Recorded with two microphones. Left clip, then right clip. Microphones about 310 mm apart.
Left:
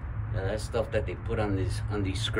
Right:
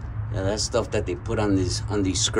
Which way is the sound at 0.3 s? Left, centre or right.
Centre.